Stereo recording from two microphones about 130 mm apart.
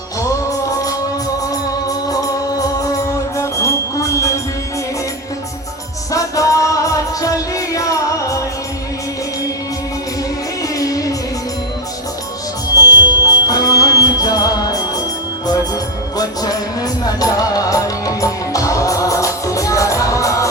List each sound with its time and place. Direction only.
1.9 s music: 30° left (ahead or behind)
6.1 s music: 25° left (ahead or behind)
10.6 s music: 25° left (ahead or behind)
12.8 s music: 30° left (ahead or behind)